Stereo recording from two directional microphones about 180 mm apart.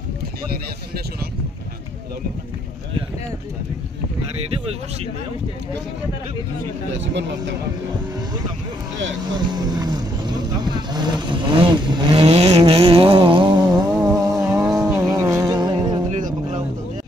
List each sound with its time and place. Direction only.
6.9 s speech: 80° right
9.3 s speech: 20° right (ahead or behind)
14.4 s a sound: 5° right (ahead or behind)
15.0 s music: 20° right (ahead or behind)
16.1 s music: 45° right (ahead or behind)